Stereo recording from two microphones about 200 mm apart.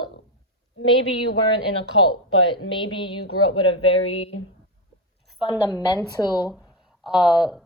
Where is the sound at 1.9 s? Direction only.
25° left (ahead or behind).